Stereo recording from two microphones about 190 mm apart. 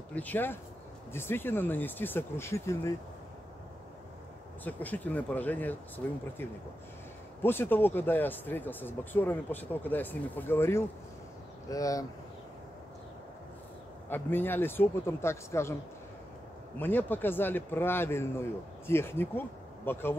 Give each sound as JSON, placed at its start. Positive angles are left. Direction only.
{"t": 0.1, "sound": "speech", "side_deg": 10}
{"t": 4.6, "sound": "speech", "side_deg": 10}
{"t": 14.0, "sound": "speech", "side_deg": 10}
{"t": 16.7, "sound": "speech", "side_deg": 10}